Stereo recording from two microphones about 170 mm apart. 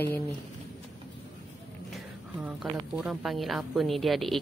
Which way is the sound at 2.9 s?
Centre (ahead or behind).